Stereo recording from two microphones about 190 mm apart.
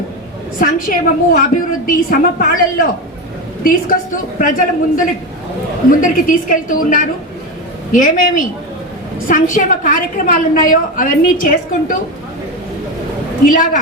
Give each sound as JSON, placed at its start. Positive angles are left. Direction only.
{"t": 0.6, "sound": "a woman's voice", "side_deg": 45}
{"t": 13.4, "sound": "a woman's voice", "side_deg": 45}